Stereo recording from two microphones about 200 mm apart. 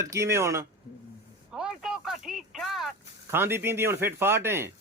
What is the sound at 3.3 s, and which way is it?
Speech, 10° right (ahead or behind).